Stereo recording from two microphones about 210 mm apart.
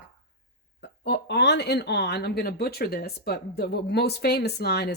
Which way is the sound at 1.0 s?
55° left (ahead or behind).